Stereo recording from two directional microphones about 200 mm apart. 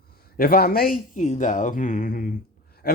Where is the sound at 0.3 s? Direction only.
50° left (ahead or behind).